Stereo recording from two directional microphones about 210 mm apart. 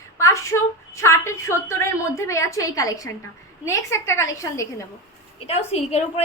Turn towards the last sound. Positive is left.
turn(degrees=30)  # may be behind; listen again after turning